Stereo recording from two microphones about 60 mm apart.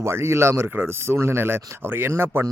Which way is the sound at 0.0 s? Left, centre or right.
Right.